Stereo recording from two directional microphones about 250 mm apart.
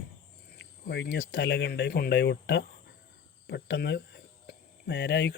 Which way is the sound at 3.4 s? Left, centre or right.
Left.